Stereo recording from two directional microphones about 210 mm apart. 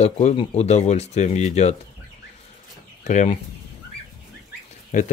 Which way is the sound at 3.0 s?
35° left (ahead or behind).